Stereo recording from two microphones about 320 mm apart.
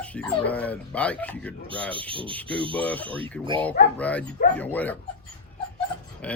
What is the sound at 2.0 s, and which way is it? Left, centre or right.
Speech, centre.